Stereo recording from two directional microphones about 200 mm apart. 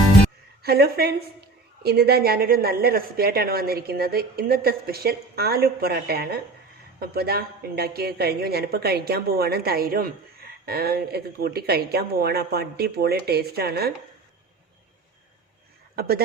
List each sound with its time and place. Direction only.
0.6 s a woman's voice: 50° right (ahead or behind)
16.0 s a woman's voice: 50° right (ahead or behind)